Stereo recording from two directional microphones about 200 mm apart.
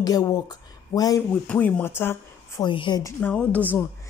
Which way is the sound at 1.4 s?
5° left (ahead or behind).